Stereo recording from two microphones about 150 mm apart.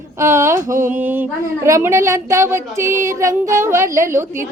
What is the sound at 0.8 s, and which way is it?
A woman's voice, 10° right (ahead or behind).